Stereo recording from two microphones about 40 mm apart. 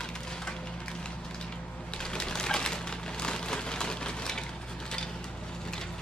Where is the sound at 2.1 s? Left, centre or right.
Centre.